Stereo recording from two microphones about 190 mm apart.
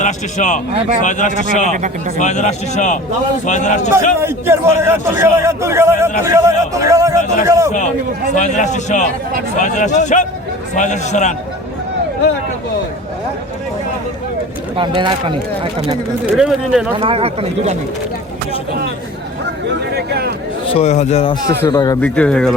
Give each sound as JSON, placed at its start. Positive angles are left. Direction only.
{"t": 0.0, "sound": "a man's voice", "side_deg": 40}
{"t": 1.7, "sound": "speech", "side_deg": -40}
{"t": 2.1, "sound": "a man's voice", "side_deg": 40}
{"t": 4.2, "sound": "a man's voice", "side_deg": -15}
{"t": 8.4, "sound": "a man's voice", "side_deg": 40}
{"t": 14.8, "sound": "speech", "side_deg": -25}
{"t": 16.2, "sound": "speech", "side_deg": 0}
{"t": 17.0, "sound": "speech", "side_deg": -30}
{"t": 19.8, "sound": "a sound", "side_deg": -60}
{"t": 20.7, "sound": "a man's voice", "side_deg": 35}
{"t": 21.5, "sound": "a man's voice", "side_deg": 15}
{"t": 22.0, "sound": "speech", "side_deg": 5}